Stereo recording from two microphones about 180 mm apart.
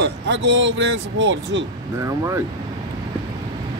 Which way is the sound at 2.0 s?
20° right (ahead or behind).